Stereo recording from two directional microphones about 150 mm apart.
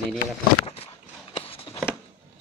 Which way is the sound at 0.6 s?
40° left (ahead or behind).